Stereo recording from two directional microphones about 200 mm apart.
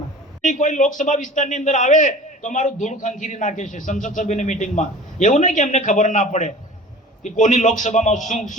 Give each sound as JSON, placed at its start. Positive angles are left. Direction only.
{"t": 0.4, "sound": "a man's voice", "side_deg": 40}